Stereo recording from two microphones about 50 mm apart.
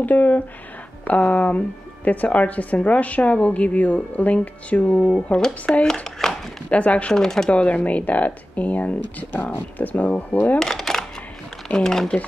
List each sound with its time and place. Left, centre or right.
0.0 s a woman's voice: left
5.3 s speech: centre
6.2 s a sound: centre
6.7 s a woman's voice: left
7.2 s speech: centre
7.4 s speech: left
10.6 s a sound: centre
11.7 s speech: centre